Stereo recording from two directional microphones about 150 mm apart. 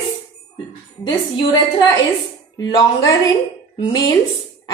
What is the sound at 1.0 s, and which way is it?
Speech, 30° left (ahead or behind).